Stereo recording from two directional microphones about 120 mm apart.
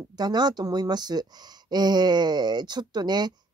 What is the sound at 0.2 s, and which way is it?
Speech, 35° right (ahead or behind).